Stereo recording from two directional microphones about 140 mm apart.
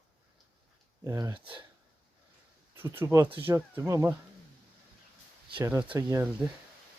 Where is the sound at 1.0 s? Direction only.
25° right (ahead or behind).